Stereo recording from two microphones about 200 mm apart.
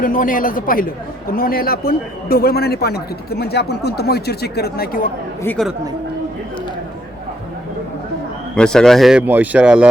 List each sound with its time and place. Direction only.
0.0 s a man's voice: 40° left (ahead or behind)
5.4 s speech: 10° left (ahead or behind)
8.5 s a man's voice: 5° left (ahead or behind)